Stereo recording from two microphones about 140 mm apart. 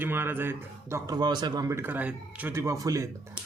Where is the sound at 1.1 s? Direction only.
30° right (ahead or behind).